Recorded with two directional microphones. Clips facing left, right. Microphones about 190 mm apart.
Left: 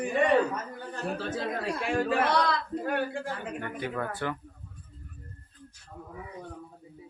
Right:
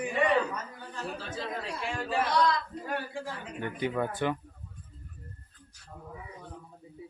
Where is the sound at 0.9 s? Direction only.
55° left (ahead or behind).